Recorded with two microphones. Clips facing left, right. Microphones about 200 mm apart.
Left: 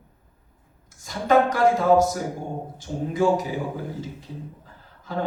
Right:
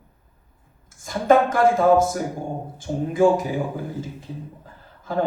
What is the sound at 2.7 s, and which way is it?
Speech, 50° right (ahead or behind).